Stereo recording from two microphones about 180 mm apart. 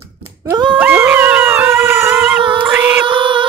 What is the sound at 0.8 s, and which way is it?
Dog, 10° right (ahead or behind).